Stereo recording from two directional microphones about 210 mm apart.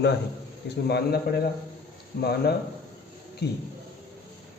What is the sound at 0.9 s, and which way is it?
Speech, 50° left (ahead or behind).